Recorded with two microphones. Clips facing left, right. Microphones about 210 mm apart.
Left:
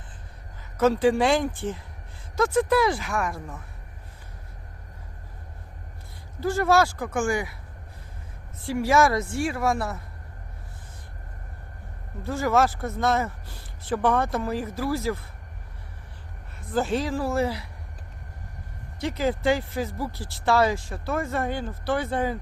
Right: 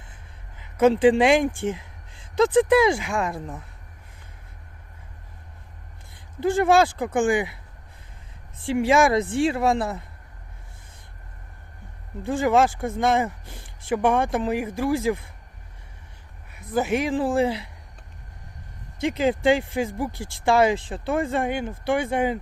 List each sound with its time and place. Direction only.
0.8 s speech: 15° right (ahead or behind)
6.4 s speech: 20° right (ahead or behind)
8.6 s speech: 15° right (ahead or behind)
12.2 s speech: 15° right (ahead or behind)
16.8 s speech: 20° right (ahead or behind)
19.0 s speech: 20° right (ahead or behind)